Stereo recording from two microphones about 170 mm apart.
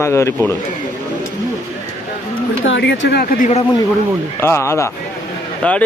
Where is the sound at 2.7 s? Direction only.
90° left.